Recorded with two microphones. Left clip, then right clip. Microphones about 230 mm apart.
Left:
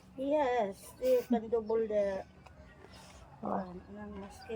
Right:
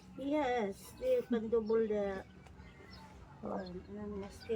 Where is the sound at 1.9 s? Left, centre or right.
Centre.